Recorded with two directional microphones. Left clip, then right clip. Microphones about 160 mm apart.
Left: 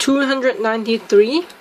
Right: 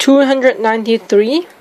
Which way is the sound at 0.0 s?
25° right (ahead or behind).